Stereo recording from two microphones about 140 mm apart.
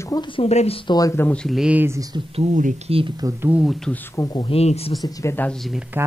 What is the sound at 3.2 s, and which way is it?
Speech, 25° right (ahead or behind).